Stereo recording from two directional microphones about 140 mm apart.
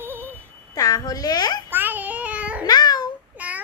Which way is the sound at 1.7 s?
15° right (ahead or behind).